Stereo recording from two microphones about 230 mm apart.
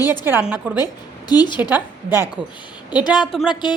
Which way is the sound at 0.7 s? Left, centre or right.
Centre.